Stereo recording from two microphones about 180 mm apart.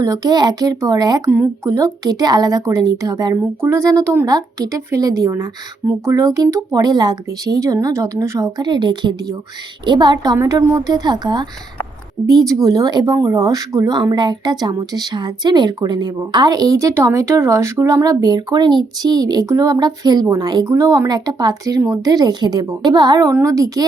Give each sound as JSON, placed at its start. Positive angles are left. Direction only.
{"t": 0.0, "sound": "speech", "side_deg": -20}